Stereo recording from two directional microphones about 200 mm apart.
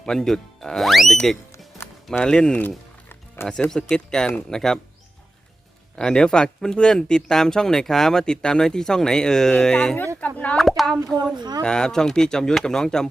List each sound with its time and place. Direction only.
0.0 s speech: 5° left (ahead or behind)
6.0 s speech: 5° left (ahead or behind)
11.3 s speech: 20° right (ahead or behind)
11.6 s speech: 5° left (ahead or behind)